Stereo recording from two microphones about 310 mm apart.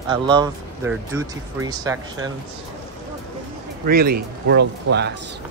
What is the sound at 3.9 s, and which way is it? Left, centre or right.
Speech, right.